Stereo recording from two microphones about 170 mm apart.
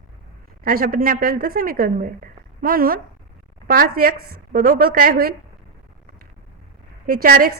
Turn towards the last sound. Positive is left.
turn(degrees=-60)  # may be behind; listen again after turning